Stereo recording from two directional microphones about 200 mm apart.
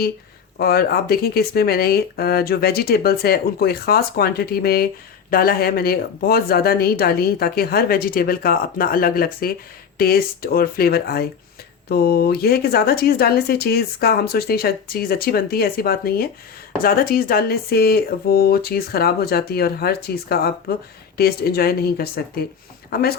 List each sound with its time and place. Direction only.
0.6 s speech: 50° left (ahead or behind)